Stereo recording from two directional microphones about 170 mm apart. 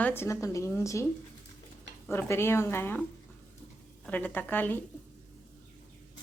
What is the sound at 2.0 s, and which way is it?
A woman's voice, 15° left (ahead or behind).